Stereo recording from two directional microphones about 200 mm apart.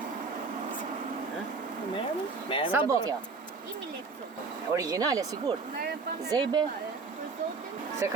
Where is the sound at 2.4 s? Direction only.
25° left (ahead or behind).